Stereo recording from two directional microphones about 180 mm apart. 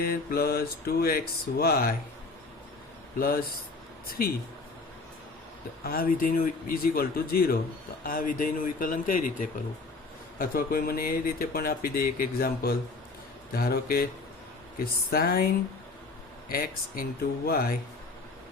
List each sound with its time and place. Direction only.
0.0 s speech: 55° left (ahead or behind)
3.2 s speech: 55° left (ahead or behind)
5.8 s speech: 55° left (ahead or behind)
15.1 s speech: 55° left (ahead or behind)
16.5 s speech: 55° left (ahead or behind)